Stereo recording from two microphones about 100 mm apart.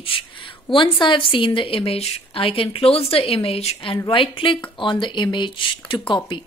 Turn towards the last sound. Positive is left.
turn(degrees=55)  # may be behind; listen again after turning